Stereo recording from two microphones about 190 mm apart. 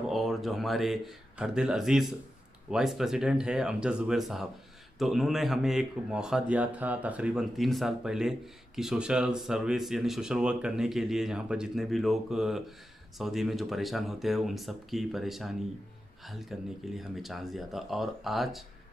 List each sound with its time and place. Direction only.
0.1 s speech: centre (ahead or behind)